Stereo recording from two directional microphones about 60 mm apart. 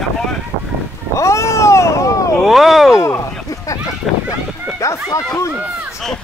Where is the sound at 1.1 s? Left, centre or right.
Left.